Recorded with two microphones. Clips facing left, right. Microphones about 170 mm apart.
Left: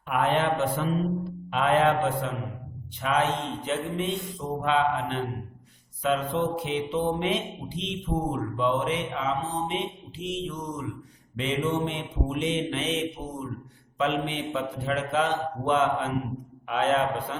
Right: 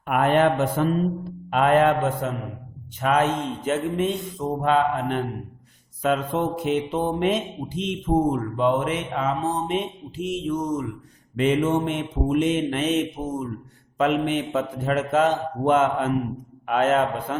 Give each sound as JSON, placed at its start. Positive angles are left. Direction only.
{"t": 0.1, "sound": "mantra", "side_deg": -55}